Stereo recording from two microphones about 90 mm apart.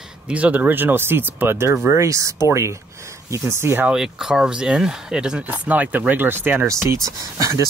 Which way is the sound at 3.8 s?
5° right (ahead or behind).